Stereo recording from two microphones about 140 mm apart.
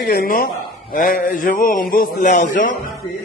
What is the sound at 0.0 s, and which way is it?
Speech, 90° left.